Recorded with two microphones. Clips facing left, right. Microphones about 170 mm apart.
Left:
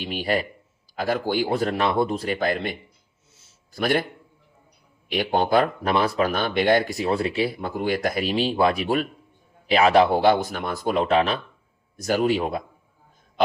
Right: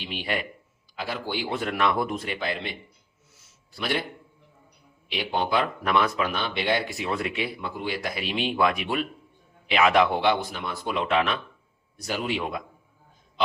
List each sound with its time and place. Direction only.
0.0 s a man's voice: 45° left (ahead or behind)
5.0 s speech: 45° left (ahead or behind)